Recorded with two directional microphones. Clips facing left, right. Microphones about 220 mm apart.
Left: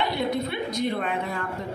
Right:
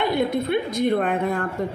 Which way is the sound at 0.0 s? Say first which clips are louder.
Right 4 dB; 50° right (ahead or behind).